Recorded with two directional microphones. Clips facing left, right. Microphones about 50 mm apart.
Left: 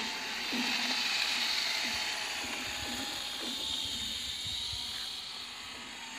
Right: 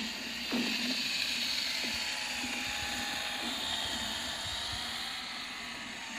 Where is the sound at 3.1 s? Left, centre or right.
Centre.